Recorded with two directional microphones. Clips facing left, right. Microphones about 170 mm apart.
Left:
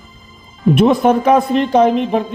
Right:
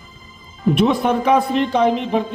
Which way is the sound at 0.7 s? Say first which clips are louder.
Left 5 dB; 45° left (ahead or behind).